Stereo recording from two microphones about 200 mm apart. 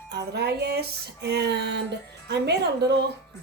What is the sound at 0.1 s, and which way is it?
Speech, 55° right (ahead or behind).